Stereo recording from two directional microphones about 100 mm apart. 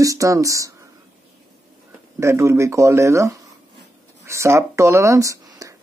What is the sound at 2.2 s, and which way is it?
A man's voice, 25° right (ahead or behind).